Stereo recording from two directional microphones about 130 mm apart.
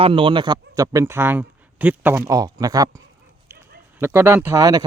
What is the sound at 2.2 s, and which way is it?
Speech, 30° right (ahead or behind).